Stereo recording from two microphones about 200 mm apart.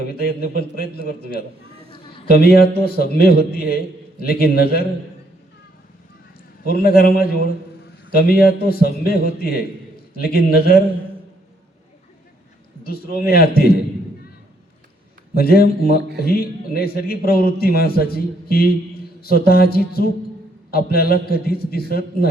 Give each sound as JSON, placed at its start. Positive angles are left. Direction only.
{"t": 0.1, "sound": "a man's voice", "side_deg": 50}
{"t": 2.3, "sound": "a man's voice", "side_deg": 50}
{"t": 6.7, "sound": "a man's voice", "side_deg": 50}
{"t": 12.8, "sound": "a man's voice", "side_deg": 50}
{"t": 15.4, "sound": "a man's voice", "side_deg": 50}